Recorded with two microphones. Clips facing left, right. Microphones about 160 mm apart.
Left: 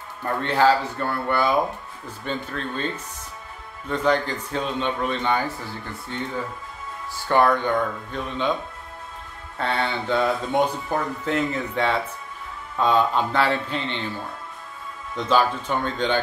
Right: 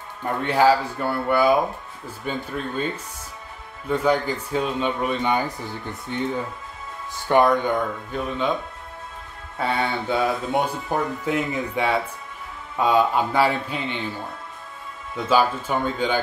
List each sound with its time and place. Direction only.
0.2 s speech: 10° right (ahead or behind)
3.9 s speech: 10° right (ahead or behind)
9.6 s speech: 10° right (ahead or behind)
15.1 s speech: 5° right (ahead or behind)